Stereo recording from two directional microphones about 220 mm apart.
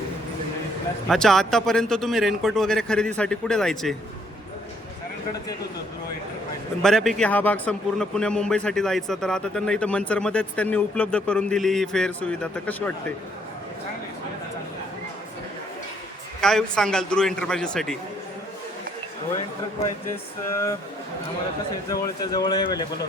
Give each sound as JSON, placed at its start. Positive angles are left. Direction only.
{"t": 1.0, "sound": "a man's voice", "side_deg": 0}
{"t": 6.8, "sound": "a man's voice", "side_deg": 0}
{"t": 16.4, "sound": "a man's voice", "side_deg": 0}
{"t": 20.5, "sound": "speech", "side_deg": 10}
{"t": 21.8, "sound": "speech", "side_deg": 15}